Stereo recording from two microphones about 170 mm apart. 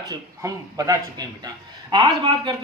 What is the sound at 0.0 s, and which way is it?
Speech, 20° right (ahead or behind).